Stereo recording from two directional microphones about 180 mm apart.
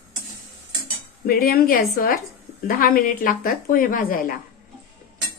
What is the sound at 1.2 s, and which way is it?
Speech, 55° left (ahead or behind).